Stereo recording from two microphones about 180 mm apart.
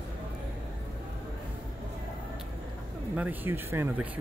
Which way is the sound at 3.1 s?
10° right (ahead or behind).